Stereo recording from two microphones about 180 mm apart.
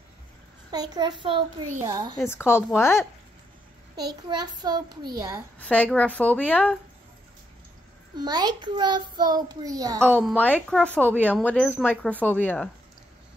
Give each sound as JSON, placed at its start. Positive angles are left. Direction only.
{"t": 0.7, "sound": "a child's voice", "side_deg": -20}
{"t": 2.2, "sound": "speech", "side_deg": 15}
{"t": 3.9, "sound": "a child's voice", "side_deg": -20}
{"t": 5.6, "sound": "speech", "side_deg": 5}
{"t": 8.2, "sound": "a child's voice", "side_deg": -20}
{"t": 9.9, "sound": "speech", "side_deg": 5}